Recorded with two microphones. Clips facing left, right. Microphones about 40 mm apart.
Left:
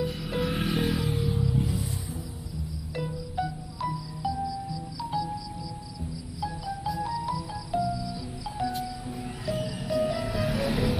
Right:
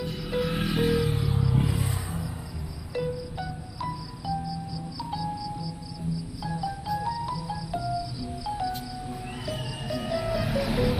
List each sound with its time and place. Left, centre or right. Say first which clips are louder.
0.0 s music: even; centre
1.5 s a sound: right 2 dB; right
2.9 s music: right 5 dB; centre
6.4 s music: left 2 dB; centre